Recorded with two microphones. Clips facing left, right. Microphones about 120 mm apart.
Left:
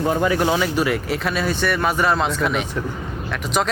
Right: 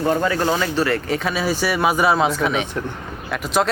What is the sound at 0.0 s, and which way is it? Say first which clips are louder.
Speech: even; 10° left (ahead or behind).